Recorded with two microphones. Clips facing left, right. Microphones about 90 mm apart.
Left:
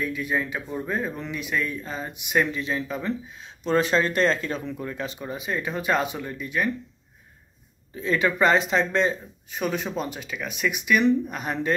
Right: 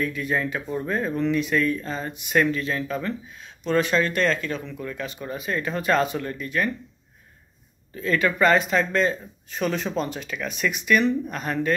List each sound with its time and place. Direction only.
0.0 s speech: 5° left (ahead or behind); by 5.2 s 25° left (ahead or behind)
5.2 s speech: 15° left (ahead or behind)
7.9 s speech: 20° left (ahead or behind)